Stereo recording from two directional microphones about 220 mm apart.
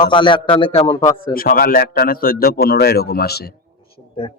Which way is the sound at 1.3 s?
40° left (ahead or behind).